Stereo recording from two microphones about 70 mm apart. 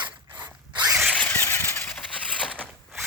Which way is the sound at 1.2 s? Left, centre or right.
Left.